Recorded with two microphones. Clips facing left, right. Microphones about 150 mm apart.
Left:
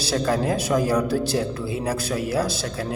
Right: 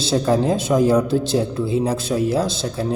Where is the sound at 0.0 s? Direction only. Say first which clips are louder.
Right 4 dB; 25° right (ahead or behind).